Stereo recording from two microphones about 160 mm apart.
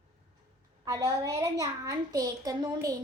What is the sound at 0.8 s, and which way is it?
A child's voice, 20° right (ahead or behind).